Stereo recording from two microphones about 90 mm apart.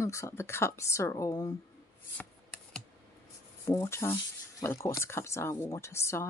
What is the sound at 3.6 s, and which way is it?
Speech, 35° left (ahead or behind).